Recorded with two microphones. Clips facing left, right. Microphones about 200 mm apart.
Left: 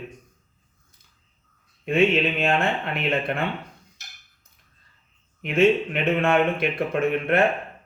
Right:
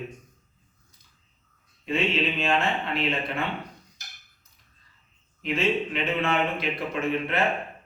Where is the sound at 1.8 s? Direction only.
55° left (ahead or behind).